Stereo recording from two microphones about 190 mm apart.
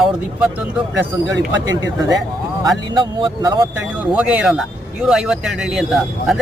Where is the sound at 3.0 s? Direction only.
25° right (ahead or behind).